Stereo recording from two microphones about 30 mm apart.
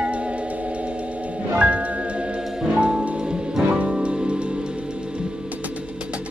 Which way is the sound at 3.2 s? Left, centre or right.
Right.